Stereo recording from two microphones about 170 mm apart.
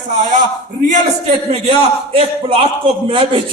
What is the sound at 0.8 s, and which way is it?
A man's voice, 40° right (ahead or behind).